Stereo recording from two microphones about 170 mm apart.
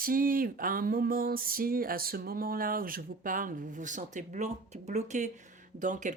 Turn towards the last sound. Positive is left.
turn(degrees=-45)  # may be behind; listen again after turning